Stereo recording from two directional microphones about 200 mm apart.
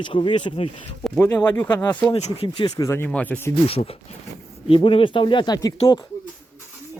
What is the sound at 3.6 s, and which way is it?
Speech, 30° left (ahead or behind).